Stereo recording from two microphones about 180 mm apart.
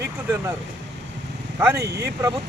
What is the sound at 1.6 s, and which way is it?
Speech, 15° right (ahead or behind).